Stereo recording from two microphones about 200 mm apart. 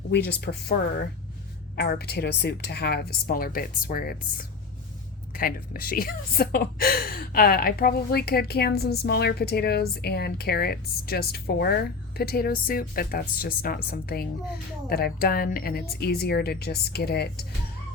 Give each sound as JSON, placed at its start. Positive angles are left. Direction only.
{"t": 0.1, "sound": "speech", "side_deg": 60}